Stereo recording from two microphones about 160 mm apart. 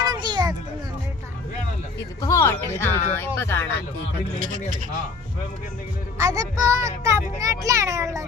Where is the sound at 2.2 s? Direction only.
20° left (ahead or behind).